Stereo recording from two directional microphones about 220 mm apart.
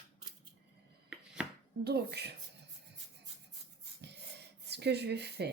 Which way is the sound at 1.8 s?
45° right (ahead or behind).